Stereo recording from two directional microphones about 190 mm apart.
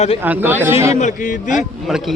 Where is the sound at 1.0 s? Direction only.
40° left (ahead or behind).